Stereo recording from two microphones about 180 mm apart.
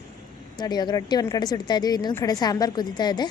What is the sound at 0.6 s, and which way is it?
A woman's voice, 25° left (ahead or behind).